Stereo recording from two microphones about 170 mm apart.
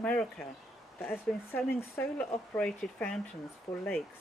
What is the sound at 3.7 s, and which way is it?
Speech, 30° left (ahead or behind).